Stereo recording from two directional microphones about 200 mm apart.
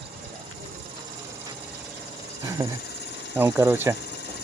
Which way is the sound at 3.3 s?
10° right (ahead or behind).